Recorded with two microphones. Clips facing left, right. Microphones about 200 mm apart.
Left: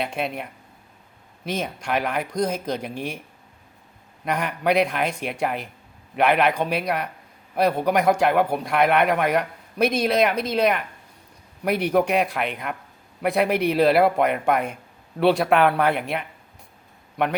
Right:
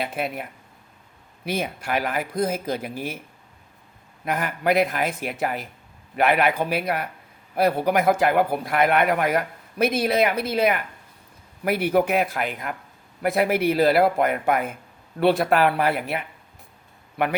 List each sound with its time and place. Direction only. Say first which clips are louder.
0.0 s a man's voice: left 1 dB; 5° right (ahead or behind)
4.3 s a man's voice: even; 5° right (ahead or behind)